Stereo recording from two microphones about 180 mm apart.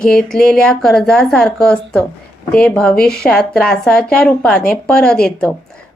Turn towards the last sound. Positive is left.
turn(degrees=5)  # may be behind; listen again after turning